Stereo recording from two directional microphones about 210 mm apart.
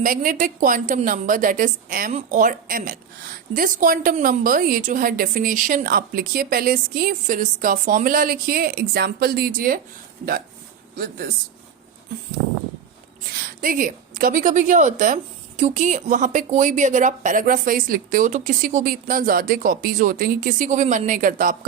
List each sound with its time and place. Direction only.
0.0 s a woman's voice: 40° right (ahead or behind)
10.9 s speech: 45° right (ahead or behind)
13.3 s a woman's voice: 40° right (ahead or behind)